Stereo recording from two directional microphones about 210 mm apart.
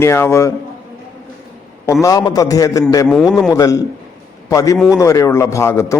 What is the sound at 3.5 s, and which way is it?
A man's voice, 15° left (ahead or behind).